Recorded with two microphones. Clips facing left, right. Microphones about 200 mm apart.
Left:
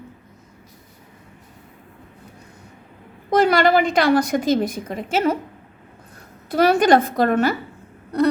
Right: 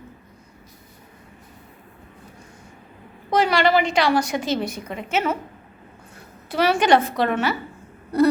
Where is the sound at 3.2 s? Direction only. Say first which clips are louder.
Left 3 dB; 45° left (ahead or behind).